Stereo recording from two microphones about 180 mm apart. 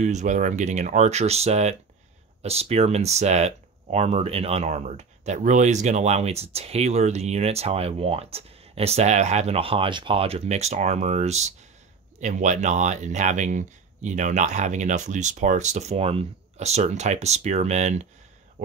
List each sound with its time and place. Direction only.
0.0 s speech: 40° right (ahead or behind)